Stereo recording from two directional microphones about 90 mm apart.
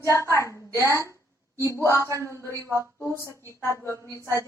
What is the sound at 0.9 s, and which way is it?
Music, 35° right (ahead or behind).